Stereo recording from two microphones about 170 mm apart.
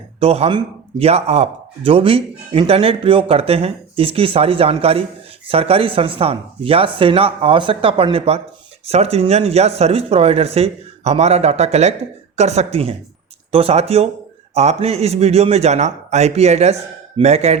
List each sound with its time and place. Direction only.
0.2 s speech: 35° right (ahead or behind)